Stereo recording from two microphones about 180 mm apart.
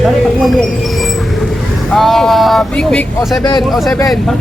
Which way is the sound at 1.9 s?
Centre (ahead or behind).